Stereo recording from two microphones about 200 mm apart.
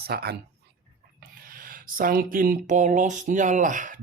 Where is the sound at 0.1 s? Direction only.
50° right (ahead or behind).